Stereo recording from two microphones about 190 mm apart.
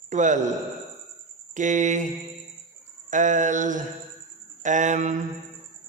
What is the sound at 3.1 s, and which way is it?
Mantra, 40° right (ahead or behind).